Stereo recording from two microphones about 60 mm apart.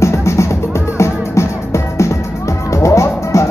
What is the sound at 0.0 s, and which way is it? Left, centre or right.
Music, left.